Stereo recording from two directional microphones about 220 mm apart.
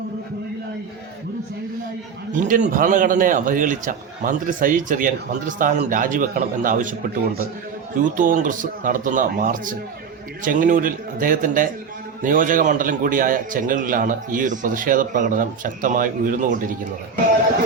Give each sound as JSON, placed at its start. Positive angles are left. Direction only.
{"t": 2.3, "sound": "a man's voice", "side_deg": -35}
{"t": 7.9, "sound": "a man's voice", "side_deg": -35}